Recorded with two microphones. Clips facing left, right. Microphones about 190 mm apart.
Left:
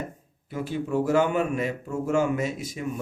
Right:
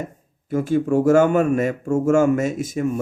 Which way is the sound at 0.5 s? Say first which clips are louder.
Right 8 dB; 45° right (ahead or behind).